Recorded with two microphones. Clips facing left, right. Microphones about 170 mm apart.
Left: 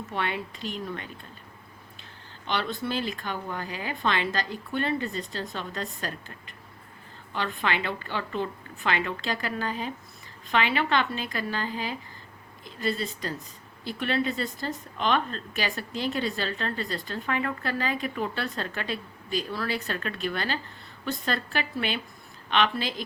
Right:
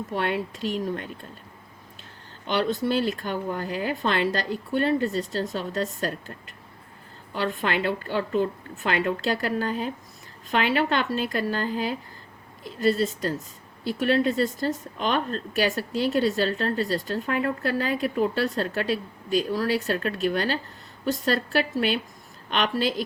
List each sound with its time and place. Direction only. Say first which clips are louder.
0.1 s a woman's voice: right 4 dB; 40° right (ahead or behind)
2.5 s a woman's voice: right 6 dB; 45° right (ahead or behind)
7.3 s a woman's voice: right 3 dB; 45° right (ahead or behind)